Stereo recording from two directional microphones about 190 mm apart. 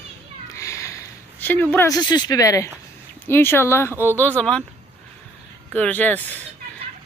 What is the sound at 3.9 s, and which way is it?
Speech, 10° right (ahead or behind).